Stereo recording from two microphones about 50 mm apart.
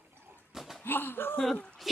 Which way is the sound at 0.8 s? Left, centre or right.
Left.